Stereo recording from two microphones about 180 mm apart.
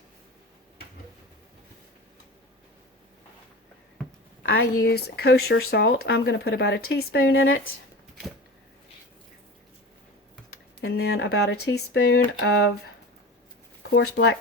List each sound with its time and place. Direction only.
4.4 s speech: 75° left (ahead or behind)
10.8 s speech: 65° left (ahead or behind)
13.9 s speech: 70° left (ahead or behind)